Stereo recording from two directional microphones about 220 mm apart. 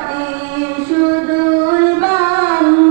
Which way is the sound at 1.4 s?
20° right (ahead or behind).